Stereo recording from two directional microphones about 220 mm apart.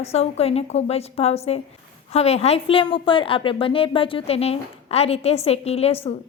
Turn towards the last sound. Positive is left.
turn(degrees=25)  # may be behind; listen again after turning